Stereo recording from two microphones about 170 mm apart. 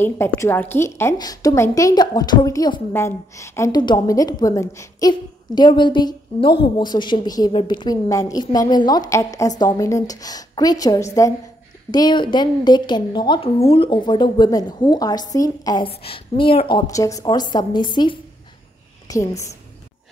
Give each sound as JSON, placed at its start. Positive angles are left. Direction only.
{"t": 0.0, "sound": "a woman's voice", "side_deg": 15}
{"t": 15.9, "sound": "a woman's voice", "side_deg": 35}